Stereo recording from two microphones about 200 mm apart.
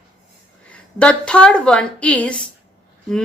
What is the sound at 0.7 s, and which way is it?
A woman's voice, 5° left (ahead or behind).